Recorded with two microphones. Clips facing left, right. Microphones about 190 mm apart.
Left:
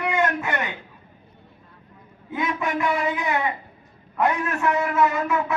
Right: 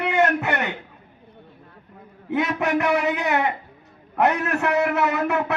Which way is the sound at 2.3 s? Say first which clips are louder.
Right 4 dB; 70° right (ahead or behind).